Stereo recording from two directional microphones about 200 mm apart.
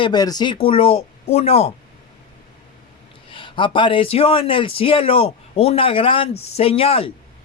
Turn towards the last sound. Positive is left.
turn(degrees=30)  # may be behind; listen again after turning